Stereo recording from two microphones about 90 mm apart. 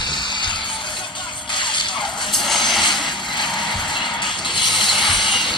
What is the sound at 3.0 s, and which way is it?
Music, 60° left (ahead or behind).